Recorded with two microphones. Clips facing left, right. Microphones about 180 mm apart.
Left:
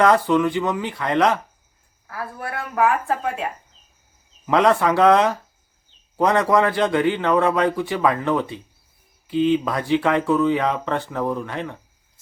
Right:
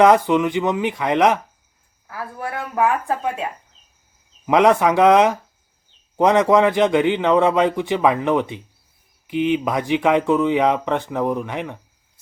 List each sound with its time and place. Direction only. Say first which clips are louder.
0.0 s speech: right 2 dB; 15° right (ahead or behind)
2.7 s speech: even; 15° right (ahead or behind)
4.4 s a man's voice: right 2 dB; 15° right (ahead or behind)